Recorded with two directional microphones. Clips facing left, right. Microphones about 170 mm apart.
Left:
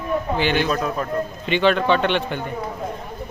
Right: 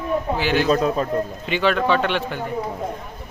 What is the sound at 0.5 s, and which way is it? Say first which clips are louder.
Speech: right 3 dB; 30° right (ahead or behind).